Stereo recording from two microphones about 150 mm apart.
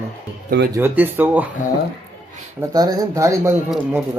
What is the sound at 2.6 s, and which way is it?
Speech, 25° right (ahead or behind).